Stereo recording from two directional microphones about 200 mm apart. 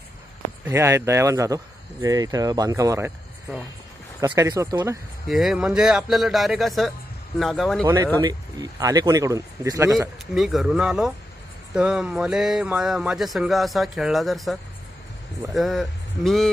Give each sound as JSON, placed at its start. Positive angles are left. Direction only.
{"t": 0.7, "sound": "speech", "side_deg": -15}
{"t": 4.2, "sound": "speech", "side_deg": -15}
{"t": 5.3, "sound": "speech", "side_deg": 0}
{"t": 7.8, "sound": "speech", "side_deg": -20}
{"t": 9.9, "sound": "speech", "side_deg": 0}